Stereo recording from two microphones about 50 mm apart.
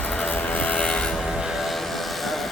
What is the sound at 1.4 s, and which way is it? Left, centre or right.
Vehicle, centre.